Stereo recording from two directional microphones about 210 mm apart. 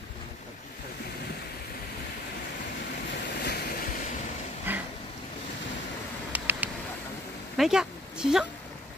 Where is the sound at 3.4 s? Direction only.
50° left (ahead or behind).